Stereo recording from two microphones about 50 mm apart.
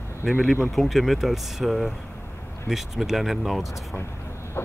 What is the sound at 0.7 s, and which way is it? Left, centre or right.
Speech, centre.